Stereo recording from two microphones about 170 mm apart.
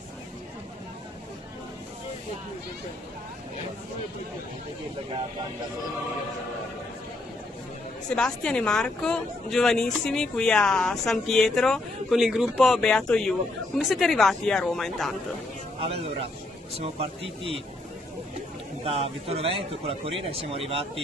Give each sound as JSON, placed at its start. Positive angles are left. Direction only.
{"t": 8.1, "sound": "speech", "side_deg": 5}
{"t": 16.8, "sound": "a man's voice", "side_deg": -35}
{"t": 18.9, "sound": "a man's voice", "side_deg": -35}